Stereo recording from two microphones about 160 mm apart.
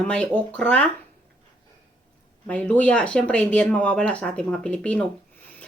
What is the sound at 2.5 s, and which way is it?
Speech, 10° left (ahead or behind).